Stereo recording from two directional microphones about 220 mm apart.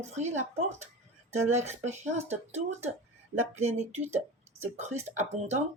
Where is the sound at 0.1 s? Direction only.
30° right (ahead or behind).